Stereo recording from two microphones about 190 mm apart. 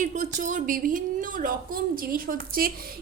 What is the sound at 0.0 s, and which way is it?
Speech, 40° right (ahead or behind).